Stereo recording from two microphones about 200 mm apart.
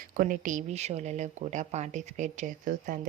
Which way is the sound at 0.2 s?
40° right (ahead or behind).